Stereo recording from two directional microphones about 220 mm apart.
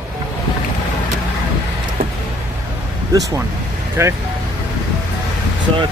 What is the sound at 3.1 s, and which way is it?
Speech, 15° right (ahead or behind).